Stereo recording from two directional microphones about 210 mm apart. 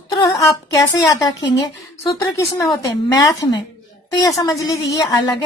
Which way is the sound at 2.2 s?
15° left (ahead or behind).